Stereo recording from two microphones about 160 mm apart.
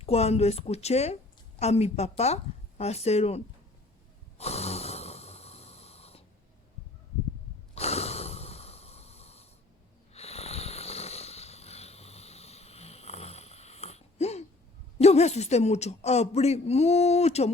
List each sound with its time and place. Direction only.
0.0 s a woman's voice: 40° left (ahead or behind)
4.4 s snoring: 40° left (ahead or behind)
7.8 s snort: 40° left (ahead or behind)
10.1 s snoring: 40° left (ahead or behind)
15.0 s speech: 40° left (ahead or behind)